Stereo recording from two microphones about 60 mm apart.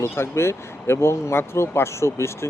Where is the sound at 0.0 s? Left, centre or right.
Left.